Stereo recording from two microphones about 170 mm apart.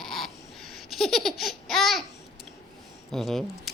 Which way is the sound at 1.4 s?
Centre (ahead or behind).